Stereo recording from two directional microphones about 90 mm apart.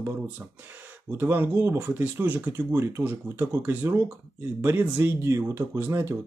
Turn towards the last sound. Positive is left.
turn(degrees=-30)  # may be behind; listen again after turning